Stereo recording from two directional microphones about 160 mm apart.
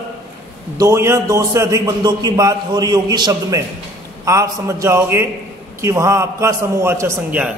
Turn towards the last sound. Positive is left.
turn(degrees=-15)  # may be behind; listen again after turning